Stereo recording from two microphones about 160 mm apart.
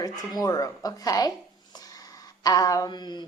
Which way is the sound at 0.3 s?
20° left (ahead or behind).